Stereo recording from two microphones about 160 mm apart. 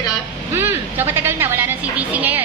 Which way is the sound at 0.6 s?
15° right (ahead or behind).